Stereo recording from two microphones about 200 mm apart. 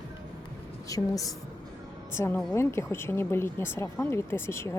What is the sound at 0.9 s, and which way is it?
Speech, 15° left (ahead or behind).